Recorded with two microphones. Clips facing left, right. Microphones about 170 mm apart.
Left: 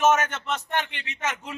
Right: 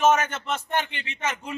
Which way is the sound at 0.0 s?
Centre (ahead or behind).